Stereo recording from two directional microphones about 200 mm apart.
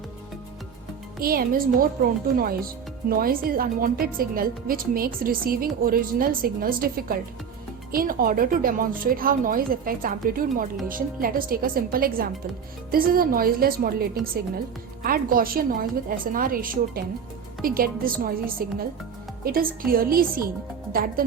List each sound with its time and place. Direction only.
1.2 s a woman's voice: 45° right (ahead or behind)